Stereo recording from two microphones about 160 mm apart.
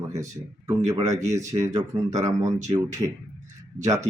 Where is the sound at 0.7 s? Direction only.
20° right (ahead or behind).